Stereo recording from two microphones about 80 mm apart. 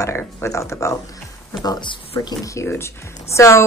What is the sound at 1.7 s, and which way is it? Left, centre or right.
Speech, left.